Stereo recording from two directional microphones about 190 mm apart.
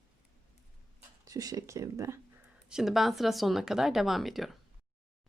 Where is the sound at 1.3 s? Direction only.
20° right (ahead or behind).